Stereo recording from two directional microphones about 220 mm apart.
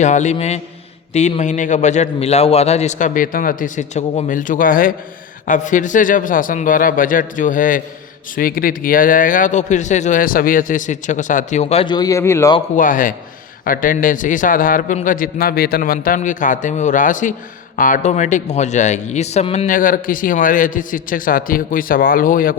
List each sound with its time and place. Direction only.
0.0 s a man's voice: 30° left (ahead or behind); by 12.5 s 10° left (ahead or behind)
12.5 s a man's voice: 35° left (ahead or behind)